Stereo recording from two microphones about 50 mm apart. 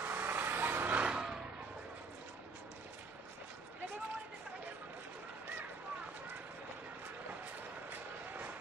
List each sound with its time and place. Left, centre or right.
0.0 s vehicle: right
1.0 s vehicle: centre